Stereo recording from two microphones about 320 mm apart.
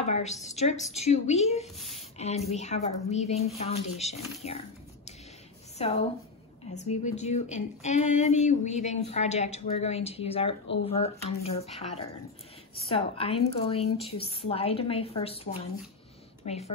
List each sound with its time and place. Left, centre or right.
0.0 s a woman's voice: left
2.0 s a sound: centre
2.5 s speech: left
5.8 s speech: centre
7.1 s speech: left
12.8 s a woman's voice: centre